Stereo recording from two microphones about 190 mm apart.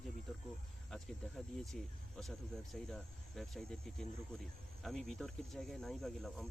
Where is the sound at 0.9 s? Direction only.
Centre (ahead or behind).